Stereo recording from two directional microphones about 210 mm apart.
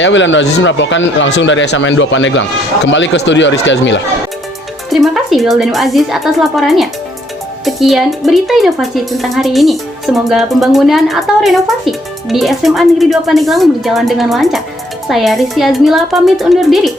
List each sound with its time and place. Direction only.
0.0 s speech: 60° left (ahead or behind)
4.9 s a woman's voice: centre (ahead or behind)